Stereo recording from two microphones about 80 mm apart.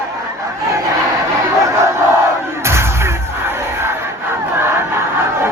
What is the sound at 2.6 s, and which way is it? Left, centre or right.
Music, right.